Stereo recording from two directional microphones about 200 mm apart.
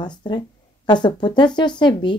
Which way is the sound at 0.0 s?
20° left (ahead or behind).